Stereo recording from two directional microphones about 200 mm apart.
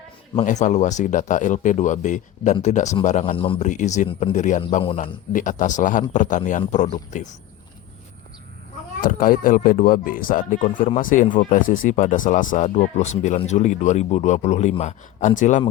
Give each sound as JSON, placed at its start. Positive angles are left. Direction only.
{"t": 0.3, "sound": "speech", "side_deg": 35}
{"t": 3.7, "sound": "speech", "side_deg": 35}
{"t": 9.0, "sound": "speech", "side_deg": 45}